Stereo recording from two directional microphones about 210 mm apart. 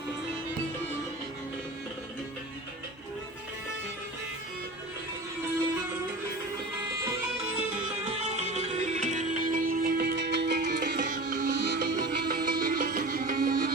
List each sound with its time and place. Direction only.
8.1 s music: 30° right (ahead or behind); by 13.7 s 45° right (ahead or behind)